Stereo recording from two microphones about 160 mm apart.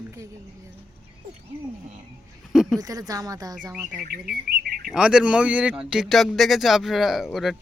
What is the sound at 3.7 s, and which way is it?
Speech, 5° right (ahead or behind).